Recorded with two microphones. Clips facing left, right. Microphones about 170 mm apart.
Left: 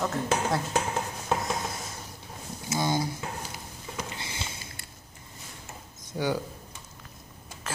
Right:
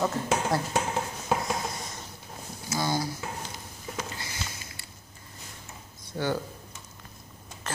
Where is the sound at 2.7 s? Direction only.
20° left (ahead or behind).